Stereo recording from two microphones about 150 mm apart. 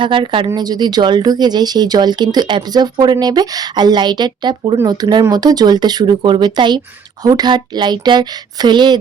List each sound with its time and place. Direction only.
0.0 s speech: 35° right (ahead or behind)